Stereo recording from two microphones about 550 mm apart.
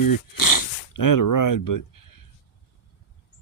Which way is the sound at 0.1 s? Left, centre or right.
Left.